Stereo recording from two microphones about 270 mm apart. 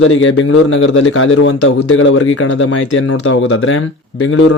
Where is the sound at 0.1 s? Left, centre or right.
Left.